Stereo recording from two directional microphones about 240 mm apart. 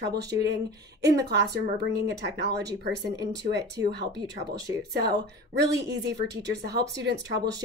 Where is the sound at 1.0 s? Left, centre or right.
Right.